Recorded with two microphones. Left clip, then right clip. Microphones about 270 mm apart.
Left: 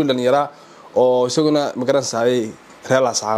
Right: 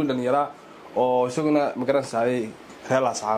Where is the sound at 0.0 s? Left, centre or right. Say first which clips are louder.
Left 6 dB; left.